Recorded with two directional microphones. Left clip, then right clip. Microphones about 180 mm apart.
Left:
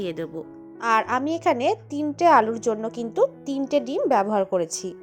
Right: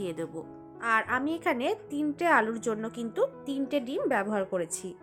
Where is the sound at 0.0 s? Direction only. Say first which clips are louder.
Left 5 dB; 25° left (ahead or behind).